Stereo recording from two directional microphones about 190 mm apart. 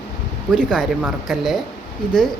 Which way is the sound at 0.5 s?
Centre (ahead or behind).